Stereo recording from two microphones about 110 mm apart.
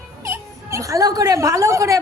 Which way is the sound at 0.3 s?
25° right (ahead or behind).